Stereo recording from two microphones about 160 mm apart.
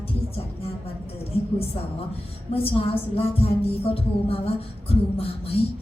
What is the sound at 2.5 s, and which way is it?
Speech, 35° left (ahead or behind).